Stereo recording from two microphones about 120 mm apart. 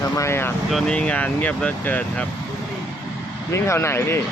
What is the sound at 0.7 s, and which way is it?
Speech, 5° left (ahead or behind).